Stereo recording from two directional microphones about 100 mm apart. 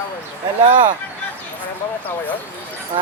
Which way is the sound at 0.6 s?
50° right (ahead or behind).